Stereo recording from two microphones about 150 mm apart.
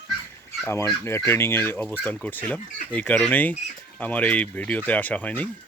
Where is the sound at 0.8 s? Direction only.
15° left (ahead or behind).